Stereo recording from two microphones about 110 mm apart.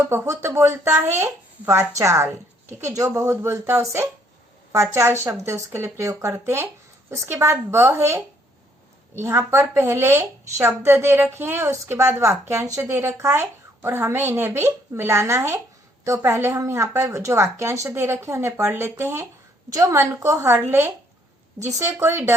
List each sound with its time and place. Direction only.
0.0 s speech: 25° right (ahead or behind)
5.2 s speech: 25° right (ahead or behind)